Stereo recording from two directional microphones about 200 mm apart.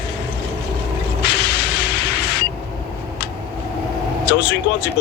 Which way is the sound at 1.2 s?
55° left (ahead or behind).